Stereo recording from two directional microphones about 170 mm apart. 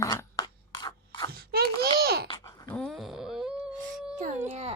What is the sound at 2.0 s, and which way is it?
Babbling, 65° right (ahead or behind).